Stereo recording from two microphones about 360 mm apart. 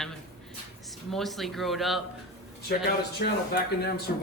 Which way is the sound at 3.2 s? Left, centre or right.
Left.